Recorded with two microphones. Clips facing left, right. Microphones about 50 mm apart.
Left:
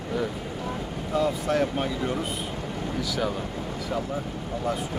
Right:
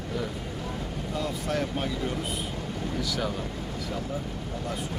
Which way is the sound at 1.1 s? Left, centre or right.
Centre.